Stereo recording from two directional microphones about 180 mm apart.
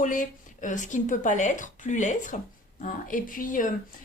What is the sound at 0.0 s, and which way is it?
A woman's voice, 45° left (ahead or behind).